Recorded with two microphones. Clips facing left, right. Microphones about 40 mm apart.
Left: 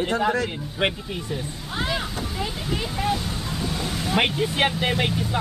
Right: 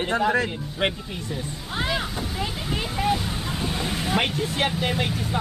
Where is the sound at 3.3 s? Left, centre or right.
Right.